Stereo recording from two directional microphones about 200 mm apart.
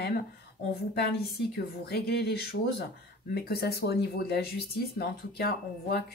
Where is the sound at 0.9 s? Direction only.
55° left (ahead or behind).